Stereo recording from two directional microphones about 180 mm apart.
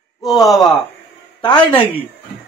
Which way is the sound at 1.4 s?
25° left (ahead or behind).